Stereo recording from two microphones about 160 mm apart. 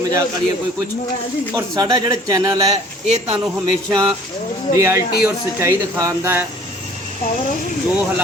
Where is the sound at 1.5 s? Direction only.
25° right (ahead or behind).